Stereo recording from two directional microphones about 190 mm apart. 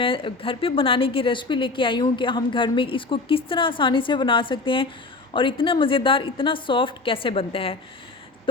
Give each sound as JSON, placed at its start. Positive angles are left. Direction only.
{"t": 0.0, "sound": "a woman's voice", "side_deg": 30}